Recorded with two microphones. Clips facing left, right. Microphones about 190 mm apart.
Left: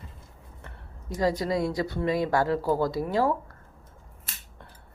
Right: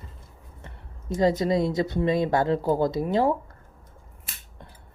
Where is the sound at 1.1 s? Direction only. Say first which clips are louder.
Right 4 dB; 25° right (ahead or behind).